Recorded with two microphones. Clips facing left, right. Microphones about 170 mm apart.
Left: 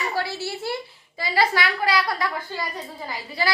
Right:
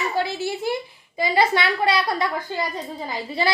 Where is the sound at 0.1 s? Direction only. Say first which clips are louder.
Right 3 dB; 20° right (ahead or behind).